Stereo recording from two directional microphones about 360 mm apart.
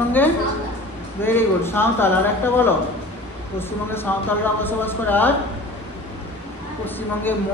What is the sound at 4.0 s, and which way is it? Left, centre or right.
A man's voice, centre.